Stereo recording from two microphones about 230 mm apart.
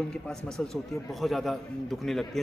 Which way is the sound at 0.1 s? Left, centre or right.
Centre.